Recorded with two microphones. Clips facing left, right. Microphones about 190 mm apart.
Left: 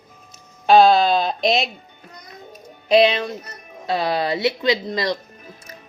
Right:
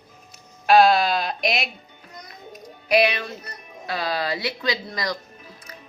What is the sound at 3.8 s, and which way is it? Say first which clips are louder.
Speech: left 5 dB; 25° left (ahead or behind).